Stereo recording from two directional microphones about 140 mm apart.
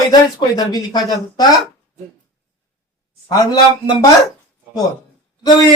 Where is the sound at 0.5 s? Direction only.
25° left (ahead or behind).